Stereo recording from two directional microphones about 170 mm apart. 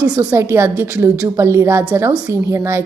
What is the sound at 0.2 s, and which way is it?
A woman's voice, 10° right (ahead or behind).